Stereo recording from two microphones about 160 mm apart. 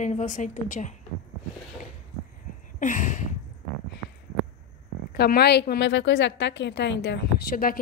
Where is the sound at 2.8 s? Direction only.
50° left (ahead or behind).